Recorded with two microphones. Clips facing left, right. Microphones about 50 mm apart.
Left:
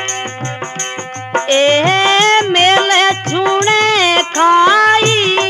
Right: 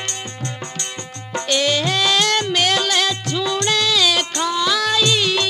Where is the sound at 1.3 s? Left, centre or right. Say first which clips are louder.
Left 8 dB; left.